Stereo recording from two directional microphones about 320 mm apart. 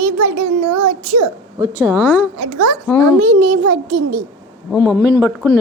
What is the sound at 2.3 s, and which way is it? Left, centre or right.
A woman's voice, right.